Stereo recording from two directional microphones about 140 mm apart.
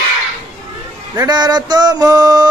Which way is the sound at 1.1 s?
30° right (ahead or behind).